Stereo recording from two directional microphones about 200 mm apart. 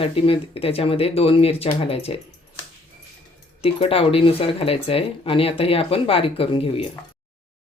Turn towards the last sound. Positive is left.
turn(degrees=25)  # may be behind; listen again after turning